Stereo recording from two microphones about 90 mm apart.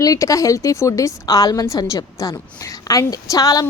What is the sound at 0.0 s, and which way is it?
A woman's voice, 40° left (ahead or behind).